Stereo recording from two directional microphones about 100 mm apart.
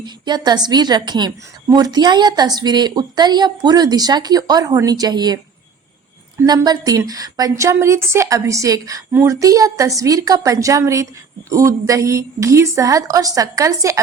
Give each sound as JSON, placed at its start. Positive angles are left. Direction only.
{"t": 0.0, "sound": "speech", "side_deg": -45}
{"t": 6.7, "sound": "a woman's voice", "side_deg": -35}